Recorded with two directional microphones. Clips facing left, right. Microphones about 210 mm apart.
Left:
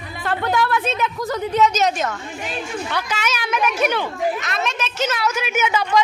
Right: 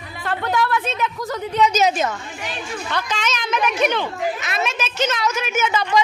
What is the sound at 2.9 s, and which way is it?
A woman's voice, 10° left (ahead or behind).